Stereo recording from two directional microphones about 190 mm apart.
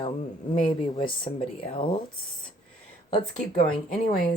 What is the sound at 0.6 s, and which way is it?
Speech, 25° left (ahead or behind).